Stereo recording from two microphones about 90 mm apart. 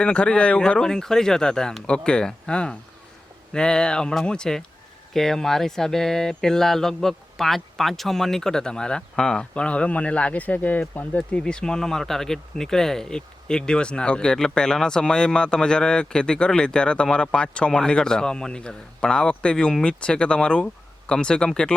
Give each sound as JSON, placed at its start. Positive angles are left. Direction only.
{"t": 0.0, "sound": "speech", "side_deg": 10}